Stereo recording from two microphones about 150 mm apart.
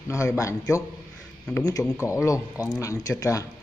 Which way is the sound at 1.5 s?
20° left (ahead or behind).